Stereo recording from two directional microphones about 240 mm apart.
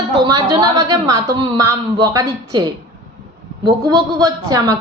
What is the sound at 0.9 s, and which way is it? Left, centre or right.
Speech, centre.